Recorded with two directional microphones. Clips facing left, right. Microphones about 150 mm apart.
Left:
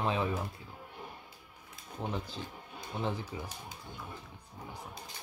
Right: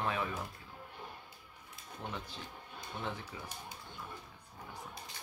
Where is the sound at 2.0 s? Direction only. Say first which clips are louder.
Left 6 dB; 35° left (ahead or behind).